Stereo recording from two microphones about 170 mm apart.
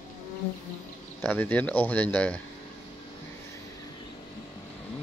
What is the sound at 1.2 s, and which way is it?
Speech, 10° left (ahead or behind).